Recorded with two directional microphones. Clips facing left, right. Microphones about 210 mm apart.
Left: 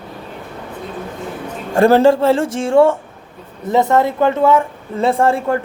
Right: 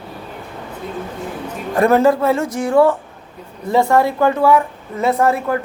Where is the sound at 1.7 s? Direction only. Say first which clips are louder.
Left 3 dB; 30° left (ahead or behind).